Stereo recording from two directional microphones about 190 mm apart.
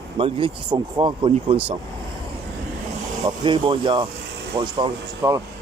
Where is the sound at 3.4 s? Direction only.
25° right (ahead or behind).